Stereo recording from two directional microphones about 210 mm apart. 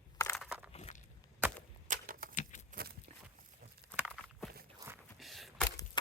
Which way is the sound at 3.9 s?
5° right (ahead or behind).